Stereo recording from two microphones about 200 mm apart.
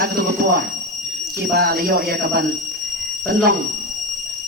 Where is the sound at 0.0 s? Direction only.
50° right (ahead or behind).